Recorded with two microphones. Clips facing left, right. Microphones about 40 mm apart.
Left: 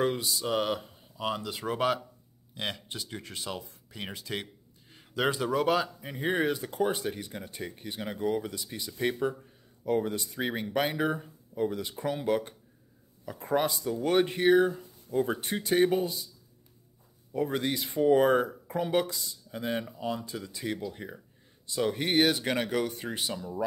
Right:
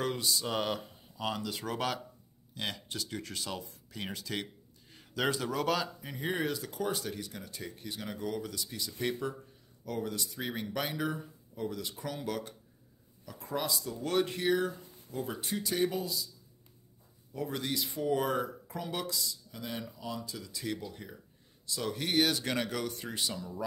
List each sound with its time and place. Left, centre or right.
0.0 s speech: centre
6.3 s speech: left
17.3 s speech: left